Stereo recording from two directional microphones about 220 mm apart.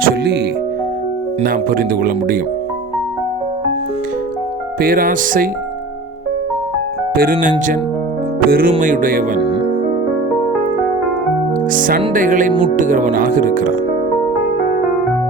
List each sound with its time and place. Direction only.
0.0 s music: 50° right (ahead or behind)
1.4 s speech: 40° right (ahead or behind)
4.8 s speech: 40° right (ahead or behind)
7.2 s speech: 40° right (ahead or behind)
11.7 s speech: 40° right (ahead or behind)